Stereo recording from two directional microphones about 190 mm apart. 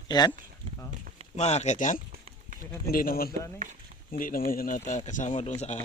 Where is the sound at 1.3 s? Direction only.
35° left (ahead or behind).